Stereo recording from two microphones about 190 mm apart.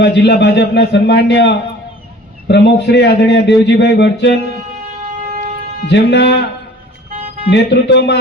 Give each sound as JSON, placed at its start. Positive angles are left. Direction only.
{"t": 0.0, "sound": "a man's voice", "side_deg": 65}
{"t": 5.3, "sound": "wind instrument", "side_deg": -40}
{"t": 5.9, "sound": "a man's voice", "side_deg": 65}
{"t": 7.5, "sound": "a man's voice", "side_deg": 65}